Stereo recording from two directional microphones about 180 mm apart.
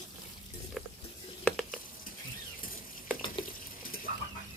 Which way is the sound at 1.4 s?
Centre (ahead or behind).